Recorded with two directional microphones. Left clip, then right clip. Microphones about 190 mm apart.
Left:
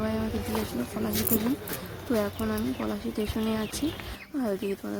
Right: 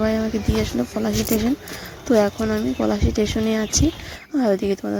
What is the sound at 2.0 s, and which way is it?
Speech, 40° right (ahead or behind).